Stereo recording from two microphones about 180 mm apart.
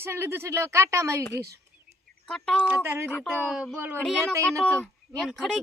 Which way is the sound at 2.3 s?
5° left (ahead or behind).